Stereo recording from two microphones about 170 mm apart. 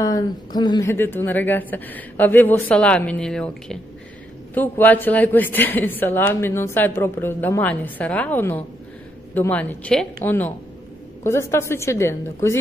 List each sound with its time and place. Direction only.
0.0 s a woman's voice: 25° left (ahead or behind)